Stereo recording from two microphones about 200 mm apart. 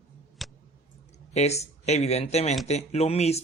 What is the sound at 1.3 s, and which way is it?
Speech, 35° left (ahead or behind).